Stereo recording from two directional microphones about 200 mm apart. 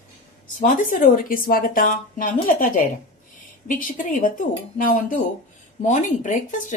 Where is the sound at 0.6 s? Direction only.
40° left (ahead or behind).